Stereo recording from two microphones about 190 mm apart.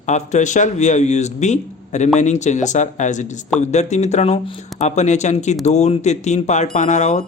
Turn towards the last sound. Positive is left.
turn(degrees=40)  # may be behind; listen again after turning